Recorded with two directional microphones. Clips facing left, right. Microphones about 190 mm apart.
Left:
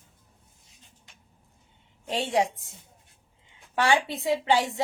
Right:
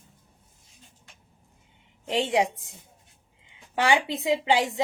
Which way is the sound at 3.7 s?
15° right (ahead or behind).